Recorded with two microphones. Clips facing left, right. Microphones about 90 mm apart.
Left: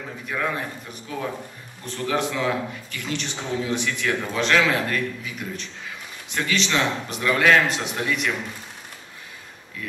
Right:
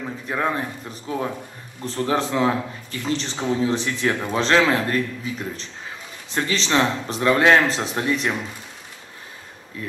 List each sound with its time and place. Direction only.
0.3 s a man's voice: 30° right (ahead or behind)